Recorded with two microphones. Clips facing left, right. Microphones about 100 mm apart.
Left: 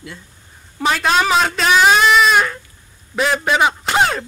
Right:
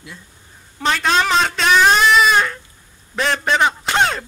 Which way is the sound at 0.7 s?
5° left (ahead or behind).